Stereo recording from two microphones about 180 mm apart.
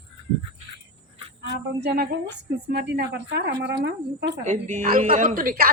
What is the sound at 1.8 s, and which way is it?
A woman's voice, 65° right (ahead or behind).